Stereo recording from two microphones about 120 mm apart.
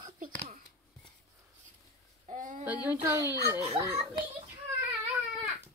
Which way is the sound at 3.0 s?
20° right (ahead or behind).